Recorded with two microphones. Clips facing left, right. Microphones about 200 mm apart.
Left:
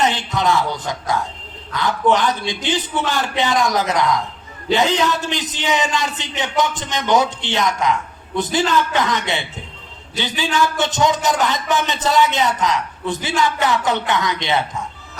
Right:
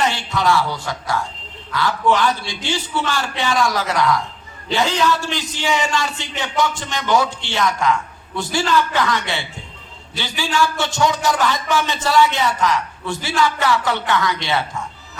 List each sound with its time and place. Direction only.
0.0 s music: 20° left (ahead or behind)
0.3 s speech: 20° left (ahead or behind)